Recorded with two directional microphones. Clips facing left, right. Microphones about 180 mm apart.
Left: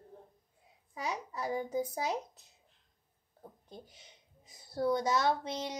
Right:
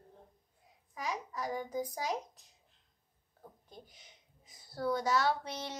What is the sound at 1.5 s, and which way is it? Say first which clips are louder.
Speech: left 5 dB; 25° left (ahead or behind).